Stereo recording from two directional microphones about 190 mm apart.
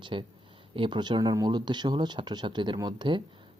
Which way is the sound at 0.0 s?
25° right (ahead or behind).